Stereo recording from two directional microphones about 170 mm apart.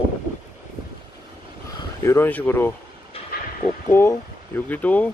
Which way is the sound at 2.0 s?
15° left (ahead or behind).